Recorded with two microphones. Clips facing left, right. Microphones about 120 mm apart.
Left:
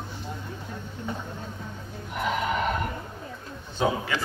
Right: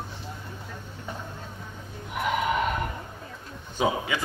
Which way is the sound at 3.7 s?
10° right (ahead or behind).